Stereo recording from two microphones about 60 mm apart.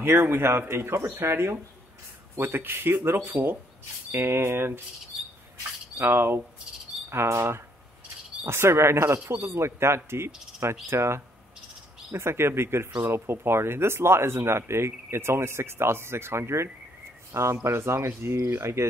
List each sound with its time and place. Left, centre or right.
0.0 s speech: right
3.3 s speech: right
4.1 s speech: right
5.9 s speech: right